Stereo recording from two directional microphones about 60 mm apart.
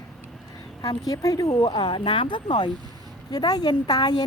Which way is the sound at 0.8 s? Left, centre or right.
Left.